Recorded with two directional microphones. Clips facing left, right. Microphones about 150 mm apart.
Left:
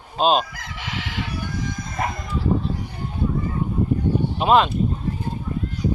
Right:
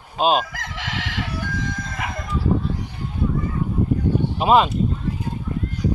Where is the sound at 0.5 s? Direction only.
85° right.